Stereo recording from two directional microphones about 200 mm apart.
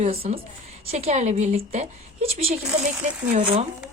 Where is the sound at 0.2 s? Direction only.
45° right (ahead or behind).